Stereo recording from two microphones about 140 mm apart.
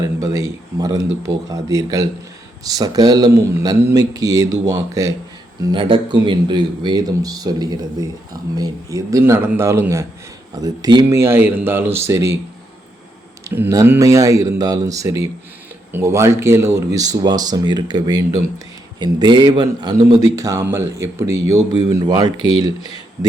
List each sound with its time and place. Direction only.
0.0 s speech: 25° right (ahead or behind)
5.7 s speech: 35° right (ahead or behind)
11.2 s speech: 15° right (ahead or behind)
13.5 s a man's voice: 15° right (ahead or behind)